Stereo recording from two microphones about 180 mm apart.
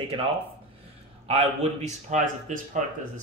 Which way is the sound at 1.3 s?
35° right (ahead or behind).